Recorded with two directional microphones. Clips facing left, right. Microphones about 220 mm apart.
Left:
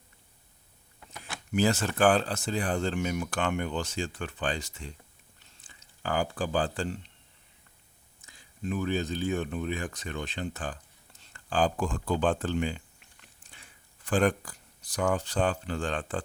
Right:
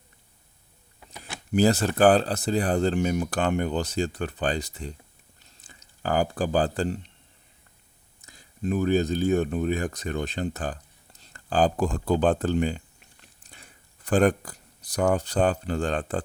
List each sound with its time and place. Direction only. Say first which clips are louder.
1.1 s speech: right 5 dB; 35° right (ahead or behind)
5.4 s a sound: right 5 dB; 40° right (ahead or behind)
8.2 s speech: right 6 dB; 40° right (ahead or behind)